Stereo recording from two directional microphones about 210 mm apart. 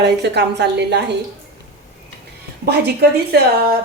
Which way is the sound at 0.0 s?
55° right (ahead or behind).